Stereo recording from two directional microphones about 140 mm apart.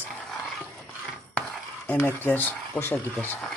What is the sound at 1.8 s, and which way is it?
Speech, 15° left (ahead or behind).